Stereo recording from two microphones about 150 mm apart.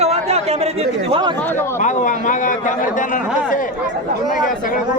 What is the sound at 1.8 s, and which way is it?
Speech, 55° left (ahead or behind).